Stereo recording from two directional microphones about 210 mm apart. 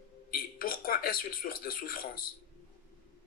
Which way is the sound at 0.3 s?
45° left (ahead or behind).